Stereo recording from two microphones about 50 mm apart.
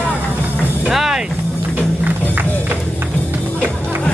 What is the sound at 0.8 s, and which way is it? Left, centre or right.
Music, centre.